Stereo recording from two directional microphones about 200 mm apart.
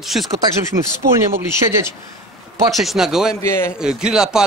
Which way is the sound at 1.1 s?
15° right (ahead or behind).